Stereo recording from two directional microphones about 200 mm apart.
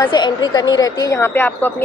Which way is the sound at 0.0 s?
20° left (ahead or behind).